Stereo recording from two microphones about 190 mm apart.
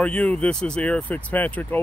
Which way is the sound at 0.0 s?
5° left (ahead or behind).